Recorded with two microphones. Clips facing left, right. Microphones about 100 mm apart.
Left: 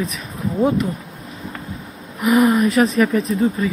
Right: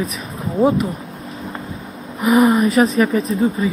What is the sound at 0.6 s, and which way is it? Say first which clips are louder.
Speech: right 3 dB; 35° right (ahead or behind).